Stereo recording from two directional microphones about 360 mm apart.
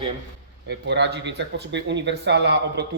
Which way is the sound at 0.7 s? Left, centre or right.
Right.